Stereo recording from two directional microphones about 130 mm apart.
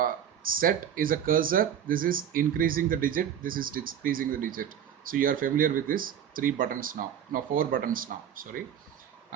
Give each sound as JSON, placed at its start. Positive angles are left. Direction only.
{"t": 0.0, "sound": "speech", "side_deg": -90}